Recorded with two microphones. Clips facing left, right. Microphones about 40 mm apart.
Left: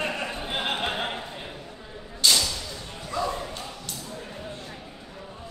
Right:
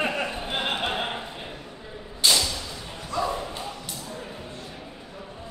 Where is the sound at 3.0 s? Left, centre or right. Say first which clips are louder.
Right 1 dB; centre.